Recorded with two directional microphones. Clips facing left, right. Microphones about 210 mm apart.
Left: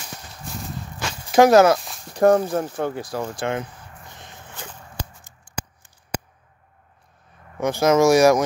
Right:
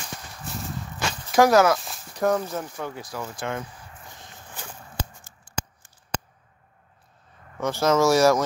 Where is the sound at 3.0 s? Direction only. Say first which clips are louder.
Left 6 dB; 30° left (ahead or behind).